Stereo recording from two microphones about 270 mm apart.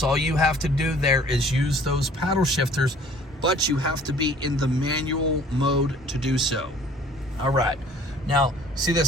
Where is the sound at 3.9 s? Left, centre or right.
Centre.